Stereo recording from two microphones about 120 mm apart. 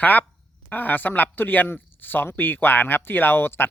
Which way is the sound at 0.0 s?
15° left (ahead or behind).